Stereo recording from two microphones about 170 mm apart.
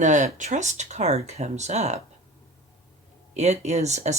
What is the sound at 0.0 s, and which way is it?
Speech, 45° right (ahead or behind).